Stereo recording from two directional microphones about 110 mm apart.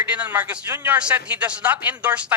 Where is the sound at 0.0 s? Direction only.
15° right (ahead or behind).